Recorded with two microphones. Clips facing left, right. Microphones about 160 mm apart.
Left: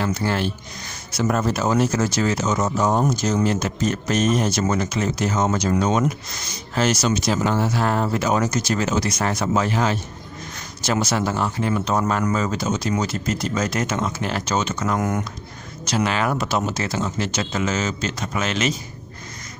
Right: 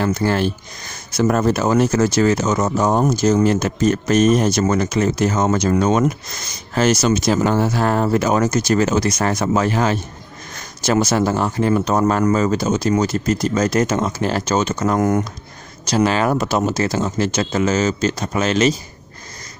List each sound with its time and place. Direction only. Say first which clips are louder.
0.0 s speech: right 5 dB; 45° right (ahead or behind)